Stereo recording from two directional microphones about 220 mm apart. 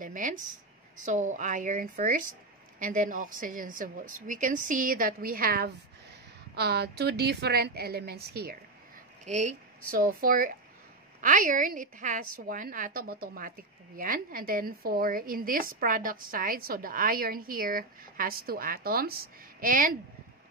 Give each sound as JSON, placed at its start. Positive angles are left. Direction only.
{"t": 0.0, "sound": "a woman's voice", "side_deg": -35}
{"t": 9.2, "sound": "a woman's voice", "side_deg": -30}